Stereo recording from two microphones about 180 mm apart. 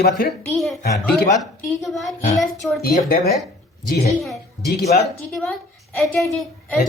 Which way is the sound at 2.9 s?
50° left (ahead or behind).